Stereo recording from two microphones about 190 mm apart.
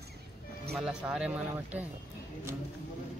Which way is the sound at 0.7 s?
5° right (ahead or behind).